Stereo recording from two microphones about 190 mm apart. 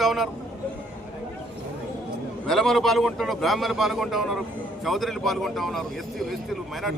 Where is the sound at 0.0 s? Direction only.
Centre (ahead or behind).